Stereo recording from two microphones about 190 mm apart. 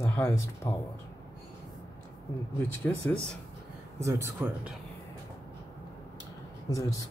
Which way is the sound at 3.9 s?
15° right (ahead or behind).